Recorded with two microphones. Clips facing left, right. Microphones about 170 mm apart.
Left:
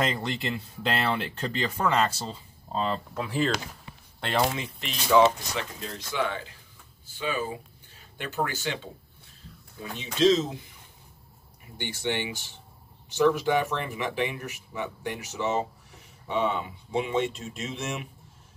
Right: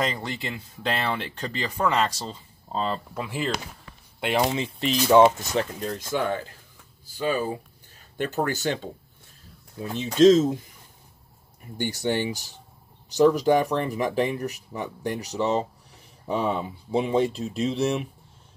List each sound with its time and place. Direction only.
0.0 s speech: centre (ahead or behind)
4.6 s speech: 35° right (ahead or behind)
5.2 s speech: 50° right (ahead or behind)
9.9 s speech: 45° right (ahead or behind)
11.8 s speech: 40° right (ahead or behind)